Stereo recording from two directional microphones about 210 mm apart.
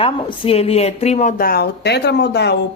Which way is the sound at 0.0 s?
25° left (ahead or behind).